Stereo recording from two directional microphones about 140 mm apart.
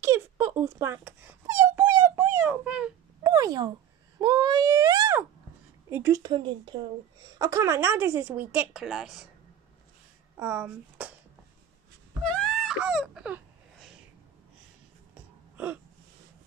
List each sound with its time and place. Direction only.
0.0 s wail: 15° right (ahead or behind)
3.3 s speech: 25° right (ahead or behind)
6.3 s speech: 35° right (ahead or behind)
7.3 s a woman's voice: 25° right (ahead or behind); by 9.3 s centre (ahead or behind)
10.4 s speech: 10° right (ahead or behind)
12.2 s a sound: 5° left (ahead or behind)
15.5 s a sound: 10° right (ahead or behind)